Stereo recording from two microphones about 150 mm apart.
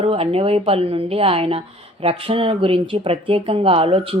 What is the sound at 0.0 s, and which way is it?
Speech, 40° right (ahead or behind).